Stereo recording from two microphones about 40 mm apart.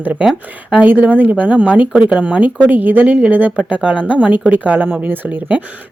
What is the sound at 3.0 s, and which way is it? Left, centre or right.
Speech, right.